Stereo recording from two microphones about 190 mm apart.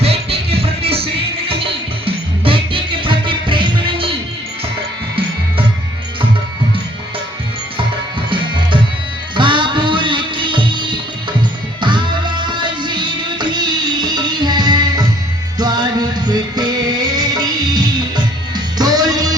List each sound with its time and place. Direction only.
0.0 s music: 30° right (ahead or behind)
9.3 s music: 25° right (ahead or behind)